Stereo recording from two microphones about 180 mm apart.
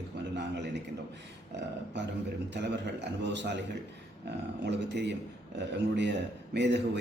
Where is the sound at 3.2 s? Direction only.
75° right (ahead or behind).